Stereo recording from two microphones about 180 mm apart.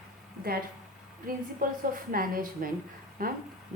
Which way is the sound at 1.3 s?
50° right (ahead or behind).